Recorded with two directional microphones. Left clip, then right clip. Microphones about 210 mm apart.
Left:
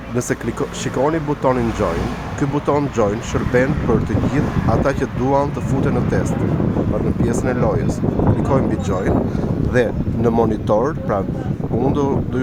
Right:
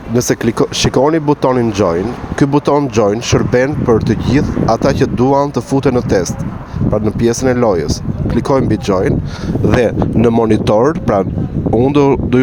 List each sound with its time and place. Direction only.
0.2 s speech: 40° right (ahead or behind)
7.3 s speech: 40° right (ahead or behind)
9.7 s speech: 50° right (ahead or behind)